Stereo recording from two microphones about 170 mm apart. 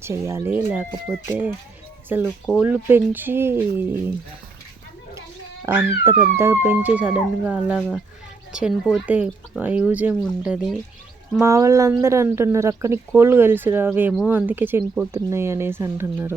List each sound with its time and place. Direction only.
0.0 s a woman's voice: 15° right (ahead or behind)
5.6 s a woman's voice: 10° right (ahead or behind)